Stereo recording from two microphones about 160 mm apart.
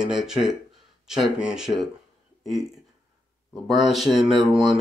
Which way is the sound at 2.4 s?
Centre (ahead or behind).